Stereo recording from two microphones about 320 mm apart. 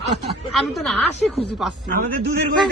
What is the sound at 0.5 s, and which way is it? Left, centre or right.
Speech, centre.